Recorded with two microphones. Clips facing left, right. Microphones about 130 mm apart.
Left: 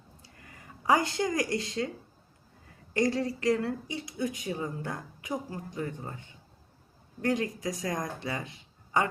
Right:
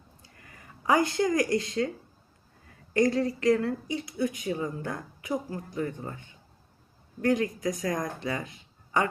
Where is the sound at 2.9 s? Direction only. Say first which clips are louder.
Right 3 dB; 25° left (ahead or behind).